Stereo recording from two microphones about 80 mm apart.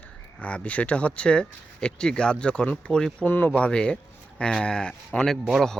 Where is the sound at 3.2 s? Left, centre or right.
Left.